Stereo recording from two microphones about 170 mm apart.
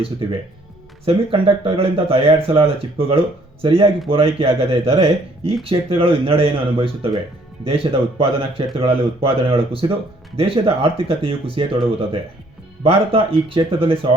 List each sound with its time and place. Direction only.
1.0 s speech: 35° right (ahead or behind)
12.8 s speech: 35° right (ahead or behind)